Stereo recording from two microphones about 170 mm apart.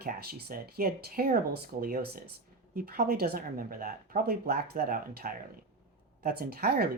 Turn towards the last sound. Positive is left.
turn(degrees=-65)  # may be behind; listen again after turning